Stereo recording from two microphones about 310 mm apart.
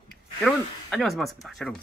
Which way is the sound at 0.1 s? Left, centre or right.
Centre.